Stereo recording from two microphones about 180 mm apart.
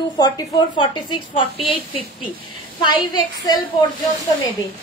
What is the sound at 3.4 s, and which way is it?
Speech, 20° left (ahead or behind).